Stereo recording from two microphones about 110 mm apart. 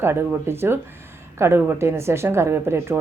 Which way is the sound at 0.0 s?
20° right (ahead or behind).